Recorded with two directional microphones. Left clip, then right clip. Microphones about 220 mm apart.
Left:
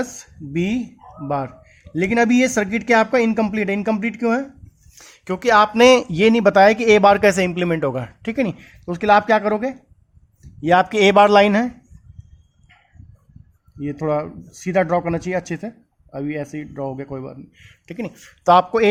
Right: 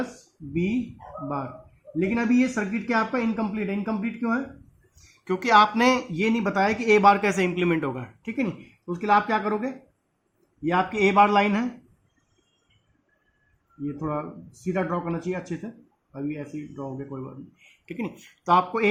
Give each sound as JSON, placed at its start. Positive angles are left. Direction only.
{"t": 0.5, "sound": "speech", "side_deg": 40}
{"t": 2.0, "sound": "speech", "side_deg": 40}
{"t": 13.9, "sound": "speech", "side_deg": 35}